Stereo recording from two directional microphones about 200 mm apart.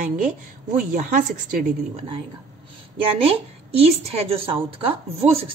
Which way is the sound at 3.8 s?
30° right (ahead or behind).